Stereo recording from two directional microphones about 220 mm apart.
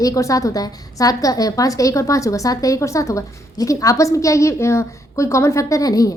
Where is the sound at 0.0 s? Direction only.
15° left (ahead or behind).